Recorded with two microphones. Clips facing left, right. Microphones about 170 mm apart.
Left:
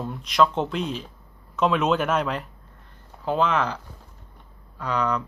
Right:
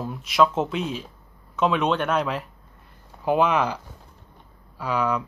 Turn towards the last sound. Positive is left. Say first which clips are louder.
# right 1 dB
turn(degrees=-5)  # may be behind; listen again after turning